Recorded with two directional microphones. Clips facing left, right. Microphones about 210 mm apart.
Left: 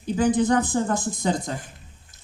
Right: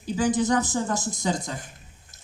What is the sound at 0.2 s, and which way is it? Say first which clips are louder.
Speech: left 3 dB; 55° left (ahead or behind).